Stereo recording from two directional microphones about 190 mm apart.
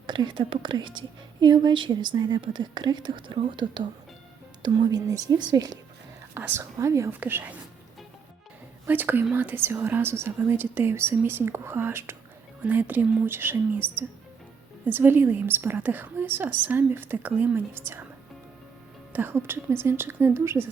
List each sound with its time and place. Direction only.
0.1 s a woman's voice: 25° right (ahead or behind)
8.9 s speech: 10° right (ahead or behind)
19.1 s speech: 10° right (ahead or behind)